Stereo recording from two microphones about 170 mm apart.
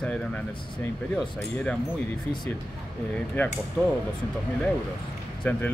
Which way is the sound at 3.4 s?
10° left (ahead or behind).